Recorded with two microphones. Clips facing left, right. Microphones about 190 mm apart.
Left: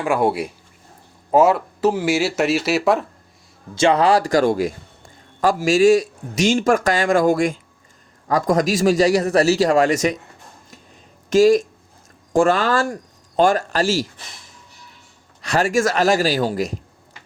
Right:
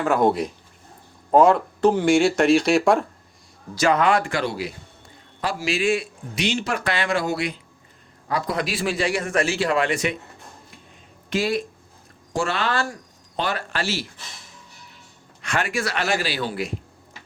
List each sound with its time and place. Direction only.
0.0 s speech: 10° left (ahead or behind)
3.8 s a man's voice: 30° left (ahead or behind)
11.3 s a man's voice: 45° left (ahead or behind)
15.4 s a man's voice: 35° left (ahead or behind)